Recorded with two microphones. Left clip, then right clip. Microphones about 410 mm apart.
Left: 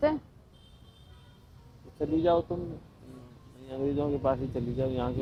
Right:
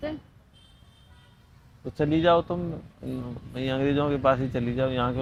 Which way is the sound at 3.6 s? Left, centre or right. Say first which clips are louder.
Right 6 dB; right.